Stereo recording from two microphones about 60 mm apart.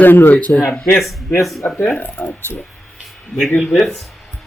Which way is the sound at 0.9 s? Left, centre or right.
Centre.